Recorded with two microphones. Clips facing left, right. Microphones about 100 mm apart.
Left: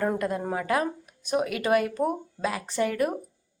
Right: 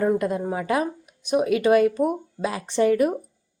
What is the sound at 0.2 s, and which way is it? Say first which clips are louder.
A woman's voice: right 3 dB; 20° right (ahead or behind).